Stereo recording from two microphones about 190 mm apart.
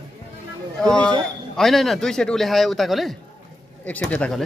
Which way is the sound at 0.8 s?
5° left (ahead or behind).